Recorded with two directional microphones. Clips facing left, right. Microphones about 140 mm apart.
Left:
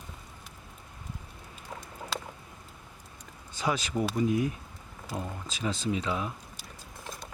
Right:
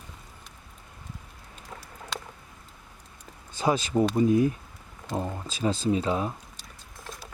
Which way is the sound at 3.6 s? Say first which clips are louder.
Right 6 dB; 30° right (ahead or behind).